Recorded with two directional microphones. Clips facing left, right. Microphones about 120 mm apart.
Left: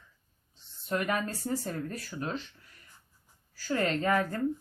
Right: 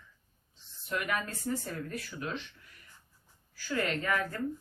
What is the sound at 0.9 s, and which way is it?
Speech, 30° left (ahead or behind).